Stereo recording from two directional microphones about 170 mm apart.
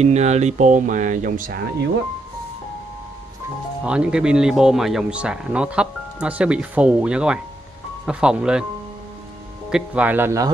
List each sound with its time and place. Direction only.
0.0 s speech: 40° right (ahead or behind)
3.8 s speech: 5° right (ahead or behind)
9.7 s speech: 5° right (ahead or behind)